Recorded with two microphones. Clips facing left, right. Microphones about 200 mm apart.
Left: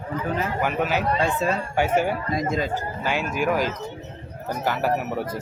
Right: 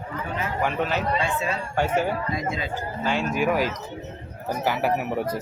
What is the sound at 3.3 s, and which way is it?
A man's voice, centre (ahead or behind).